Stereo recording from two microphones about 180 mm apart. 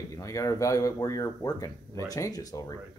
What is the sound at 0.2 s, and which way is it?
Speech, 15° left (ahead or behind).